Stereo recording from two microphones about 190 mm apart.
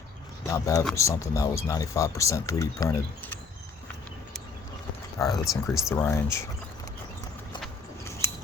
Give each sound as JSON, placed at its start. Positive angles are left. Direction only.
{"t": 0.4, "sound": "speech", "side_deg": 15}
{"t": 5.2, "sound": "speech", "side_deg": 15}